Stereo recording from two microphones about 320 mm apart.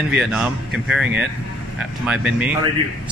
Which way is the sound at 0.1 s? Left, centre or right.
Centre.